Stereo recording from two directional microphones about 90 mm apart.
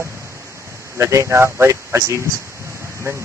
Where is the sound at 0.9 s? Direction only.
35° right (ahead or behind).